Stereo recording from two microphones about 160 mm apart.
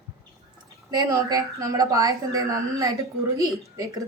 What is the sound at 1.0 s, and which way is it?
A woman's voice, 20° right (ahead or behind).